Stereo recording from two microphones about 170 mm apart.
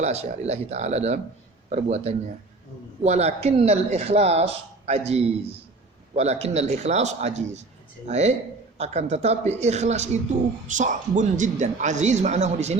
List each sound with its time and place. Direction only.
0.0 s a woman's voice: 40° right (ahead or behind)